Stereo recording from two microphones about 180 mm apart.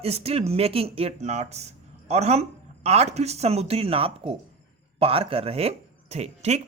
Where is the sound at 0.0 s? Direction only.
35° right (ahead or behind).